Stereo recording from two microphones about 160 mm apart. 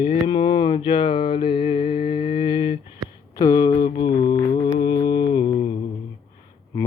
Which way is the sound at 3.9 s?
30° left (ahead or behind).